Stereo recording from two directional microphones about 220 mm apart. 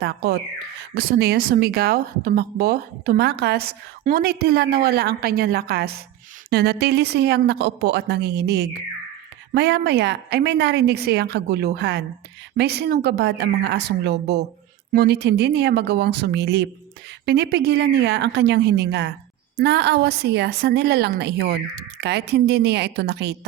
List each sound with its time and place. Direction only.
0.0 s a woman's voice: 45° right (ahead or behind)